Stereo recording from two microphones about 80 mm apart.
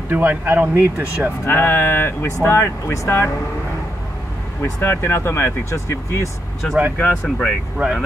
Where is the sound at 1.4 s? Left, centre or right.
Left.